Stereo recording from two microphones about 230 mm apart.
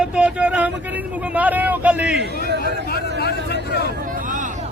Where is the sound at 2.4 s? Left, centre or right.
Right.